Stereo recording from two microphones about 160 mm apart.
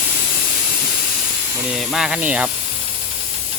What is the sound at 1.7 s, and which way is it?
Speech, 5° right (ahead or behind).